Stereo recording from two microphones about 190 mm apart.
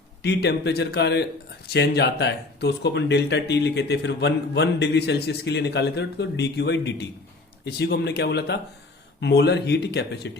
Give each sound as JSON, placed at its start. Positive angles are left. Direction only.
{"t": 0.2, "sound": "speech", "side_deg": 60}